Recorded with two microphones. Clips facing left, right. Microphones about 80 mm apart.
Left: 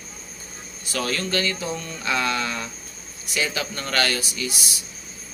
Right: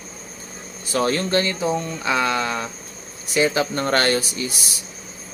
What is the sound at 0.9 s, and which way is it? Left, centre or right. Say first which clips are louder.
Speech: right 6 dB; right.